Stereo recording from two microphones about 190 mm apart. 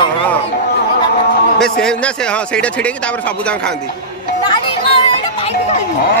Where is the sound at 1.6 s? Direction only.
5° left (ahead or behind).